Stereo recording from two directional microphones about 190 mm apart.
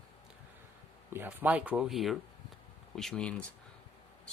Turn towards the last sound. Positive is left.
turn(degrees=5)  # may be behind; listen again after turning